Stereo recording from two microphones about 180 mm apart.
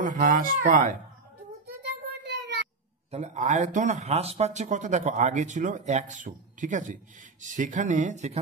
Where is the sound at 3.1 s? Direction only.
40° right (ahead or behind).